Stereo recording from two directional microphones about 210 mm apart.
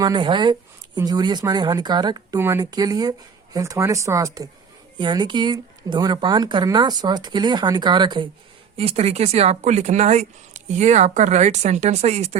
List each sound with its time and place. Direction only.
0.0 s speech: 20° right (ahead or behind)